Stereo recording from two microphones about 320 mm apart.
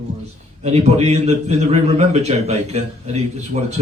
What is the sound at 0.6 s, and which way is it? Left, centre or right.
A man's voice, centre.